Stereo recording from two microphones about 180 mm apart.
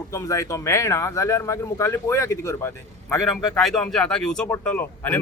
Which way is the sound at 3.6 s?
Centre (ahead or behind).